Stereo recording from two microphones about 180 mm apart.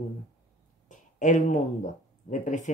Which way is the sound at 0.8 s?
45° left (ahead or behind).